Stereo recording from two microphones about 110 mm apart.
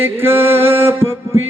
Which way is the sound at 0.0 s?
20° right (ahead or behind).